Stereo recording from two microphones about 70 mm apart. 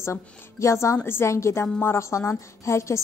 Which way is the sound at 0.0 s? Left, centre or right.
Left.